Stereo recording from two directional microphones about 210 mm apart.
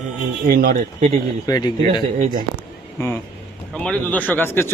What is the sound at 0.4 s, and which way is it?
Speech, 45° right (ahead or behind).